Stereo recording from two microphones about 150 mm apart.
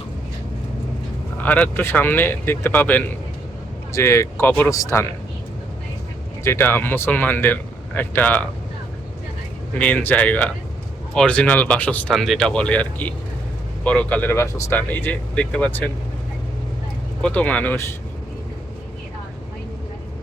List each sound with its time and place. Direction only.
1.4 s speech: 10° left (ahead or behind)
6.4 s speech: 15° left (ahead or behind)
9.7 s speech: 10° left (ahead or behind)
12.1 s speech: centre (ahead or behind)
17.2 s speech: 10° left (ahead or behind)